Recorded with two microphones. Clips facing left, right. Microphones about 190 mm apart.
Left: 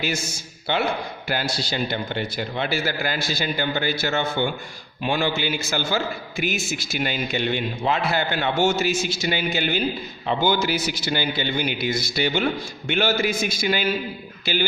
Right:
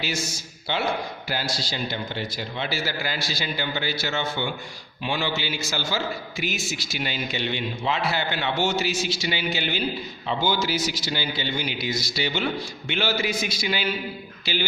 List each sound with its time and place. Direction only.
0.0 s a man's voice: 55° left (ahead or behind)